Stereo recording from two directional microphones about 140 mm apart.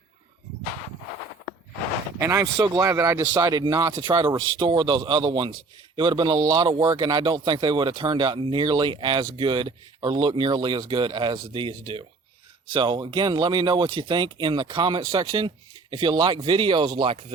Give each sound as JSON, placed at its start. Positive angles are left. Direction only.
{"t": 2.2, "sound": "speech", "side_deg": -20}